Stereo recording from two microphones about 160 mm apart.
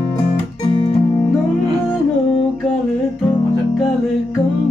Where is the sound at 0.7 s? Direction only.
30° left (ahead or behind).